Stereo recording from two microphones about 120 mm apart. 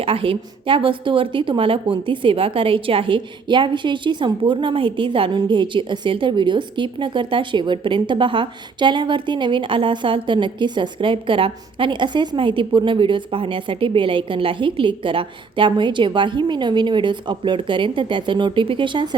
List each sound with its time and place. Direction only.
0.0 s a woman's voice: 50° right (ahead or behind)